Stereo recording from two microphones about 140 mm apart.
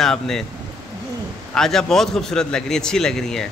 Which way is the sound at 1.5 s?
5° left (ahead or behind).